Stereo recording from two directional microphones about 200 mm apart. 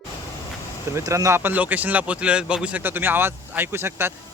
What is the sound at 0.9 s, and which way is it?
Speech, 15° right (ahead or behind).